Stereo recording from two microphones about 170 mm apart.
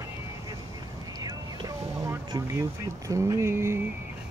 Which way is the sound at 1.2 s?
25° right (ahead or behind).